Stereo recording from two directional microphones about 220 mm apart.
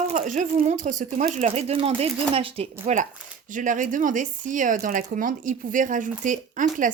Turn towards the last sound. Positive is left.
turn(degrees=-35)  # may be behind; listen again after turning